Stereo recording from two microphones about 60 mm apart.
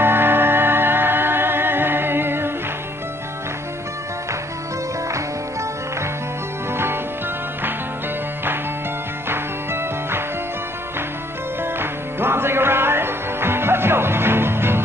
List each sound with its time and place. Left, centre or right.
0.0 s music: right
6.7 s music: right
9.3 s music: right
11.6 s music: right